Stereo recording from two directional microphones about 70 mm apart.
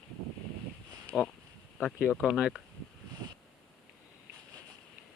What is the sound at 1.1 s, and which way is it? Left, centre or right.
Speech, centre.